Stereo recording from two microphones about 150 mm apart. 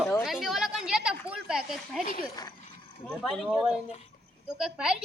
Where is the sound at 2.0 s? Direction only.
70° left (ahead or behind).